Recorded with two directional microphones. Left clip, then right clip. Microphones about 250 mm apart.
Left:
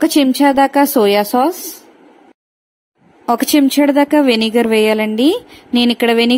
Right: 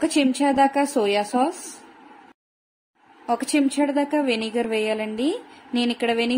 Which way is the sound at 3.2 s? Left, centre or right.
Left.